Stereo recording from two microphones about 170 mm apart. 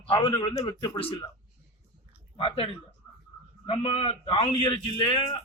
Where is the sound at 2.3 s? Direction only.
35° left (ahead or behind).